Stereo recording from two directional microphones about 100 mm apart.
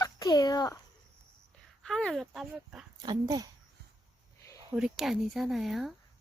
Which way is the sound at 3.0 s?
45° right (ahead or behind).